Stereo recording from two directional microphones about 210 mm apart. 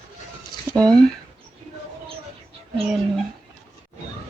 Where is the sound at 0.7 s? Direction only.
15° right (ahead or behind).